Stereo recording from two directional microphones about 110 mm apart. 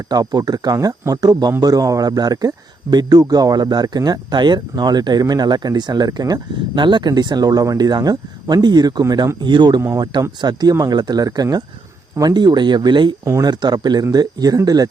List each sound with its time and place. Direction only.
0.1 s speech: 35° right (ahead or behind)
9.8 s speech: 30° right (ahead or behind)